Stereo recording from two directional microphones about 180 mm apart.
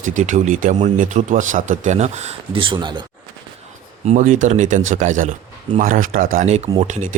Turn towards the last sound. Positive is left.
turn(degrees=-45)  # may be behind; listen again after turning